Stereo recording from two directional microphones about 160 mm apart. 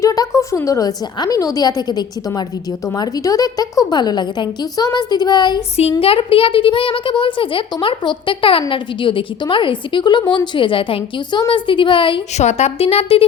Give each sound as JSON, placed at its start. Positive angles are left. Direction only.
{"t": 0.0, "sound": "a woman's voice", "side_deg": 20}
{"t": 12.4, "sound": "a woman's voice", "side_deg": 45}